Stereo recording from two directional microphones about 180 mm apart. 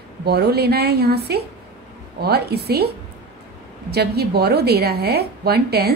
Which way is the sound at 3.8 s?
65° right (ahead or behind).